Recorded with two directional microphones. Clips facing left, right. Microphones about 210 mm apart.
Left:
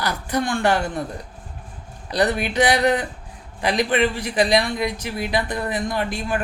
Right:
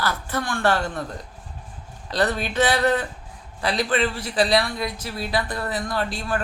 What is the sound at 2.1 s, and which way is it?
A man's voice, 15° left (ahead or behind).